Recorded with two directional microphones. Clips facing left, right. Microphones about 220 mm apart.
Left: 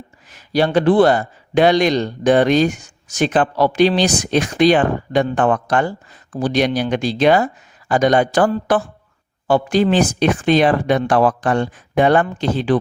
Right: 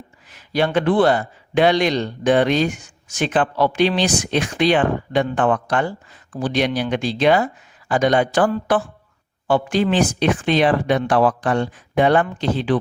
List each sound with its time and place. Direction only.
0.3 s speech: 40° left (ahead or behind)